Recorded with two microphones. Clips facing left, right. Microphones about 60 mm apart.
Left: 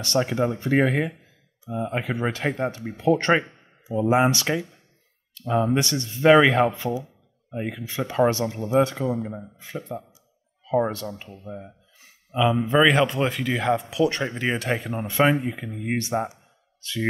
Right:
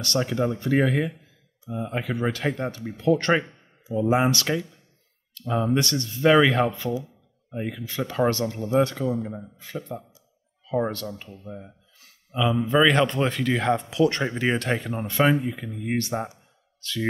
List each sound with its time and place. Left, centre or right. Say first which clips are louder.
0.0 s speech: left 2 dB; left
3.2 s a sound: left 2 dB; left
4.1 s a man's voice: left 2 dB; centre
11.4 s a sound: left 2 dB; centre
12.7 s speech: even; centre
15.0 s a man's voice: left 1 dB; centre